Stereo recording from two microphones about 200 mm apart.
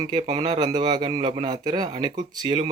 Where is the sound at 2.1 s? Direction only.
35° right (ahead or behind).